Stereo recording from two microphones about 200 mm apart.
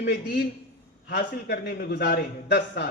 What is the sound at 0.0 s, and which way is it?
A man's voice, 50° left (ahead or behind).